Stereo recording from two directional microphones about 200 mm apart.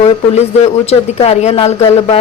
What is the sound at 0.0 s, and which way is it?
Speech, 35° left (ahead or behind).